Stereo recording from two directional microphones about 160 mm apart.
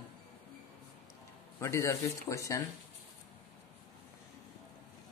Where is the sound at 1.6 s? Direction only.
15° left (ahead or behind).